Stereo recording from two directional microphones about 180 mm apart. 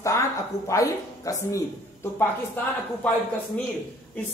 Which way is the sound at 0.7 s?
15° left (ahead or behind).